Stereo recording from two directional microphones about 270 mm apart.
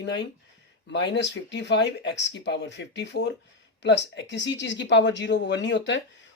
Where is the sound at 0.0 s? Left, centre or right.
Left.